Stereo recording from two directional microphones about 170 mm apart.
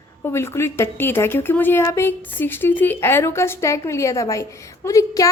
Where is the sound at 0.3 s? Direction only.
15° left (ahead or behind).